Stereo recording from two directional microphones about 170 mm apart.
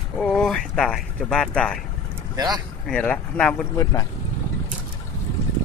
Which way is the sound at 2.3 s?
20° right (ahead or behind).